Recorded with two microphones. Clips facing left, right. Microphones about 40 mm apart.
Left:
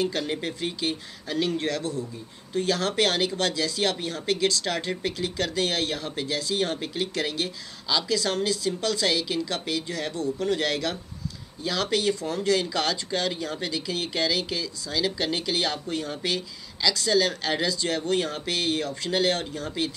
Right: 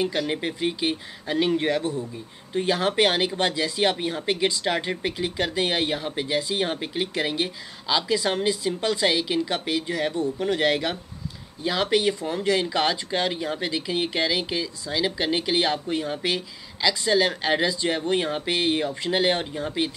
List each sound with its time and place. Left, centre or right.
0.3 s speech: centre